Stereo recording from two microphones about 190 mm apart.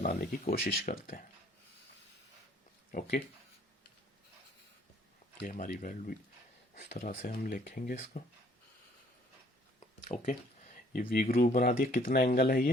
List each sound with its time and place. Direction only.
0.0 s speech: 40° left (ahead or behind)
0.4 s speech: 50° left (ahead or behind)
5.4 s speech: 45° left (ahead or behind)
10.1 s speech: 35° left (ahead or behind)
11.1 s speech: 50° left (ahead or behind)